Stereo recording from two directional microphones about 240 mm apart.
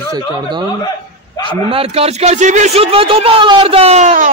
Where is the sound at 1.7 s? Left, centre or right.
Right.